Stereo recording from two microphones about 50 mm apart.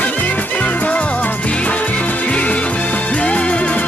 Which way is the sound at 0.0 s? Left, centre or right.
Left.